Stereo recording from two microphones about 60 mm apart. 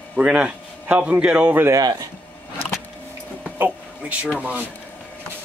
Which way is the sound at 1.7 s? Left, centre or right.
Right.